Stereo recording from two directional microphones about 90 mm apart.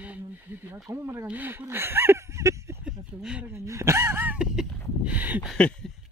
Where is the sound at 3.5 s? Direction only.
35° right (ahead or behind).